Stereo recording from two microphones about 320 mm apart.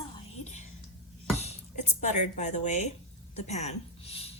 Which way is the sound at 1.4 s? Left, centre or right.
Centre.